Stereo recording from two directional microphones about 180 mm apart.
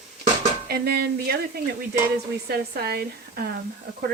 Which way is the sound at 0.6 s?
60° right (ahead or behind).